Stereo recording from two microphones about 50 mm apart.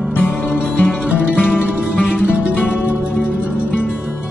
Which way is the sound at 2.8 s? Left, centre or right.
Right.